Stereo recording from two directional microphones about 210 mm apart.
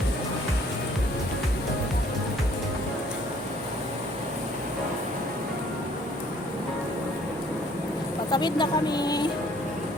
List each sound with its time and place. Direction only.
8.3 s speech: 20° left (ahead or behind)